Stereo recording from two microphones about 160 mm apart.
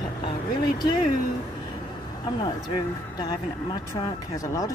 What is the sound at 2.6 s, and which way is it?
Speech, 25° left (ahead or behind).